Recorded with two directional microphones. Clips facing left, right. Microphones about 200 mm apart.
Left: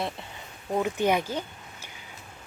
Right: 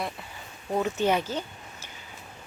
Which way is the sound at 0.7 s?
10° left (ahead or behind).